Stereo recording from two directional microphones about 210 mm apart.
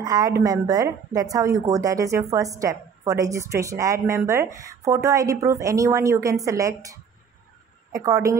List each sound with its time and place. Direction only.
0.0 s a woman's voice: 15° right (ahead or behind)